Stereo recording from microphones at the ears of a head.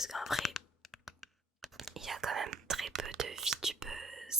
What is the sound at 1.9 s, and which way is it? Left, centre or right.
Whispering, right.